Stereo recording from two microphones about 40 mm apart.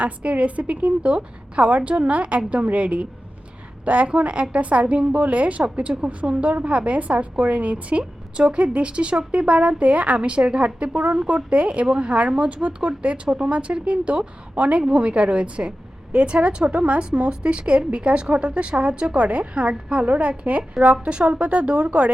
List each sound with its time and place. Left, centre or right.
0.0 s a woman's voice: right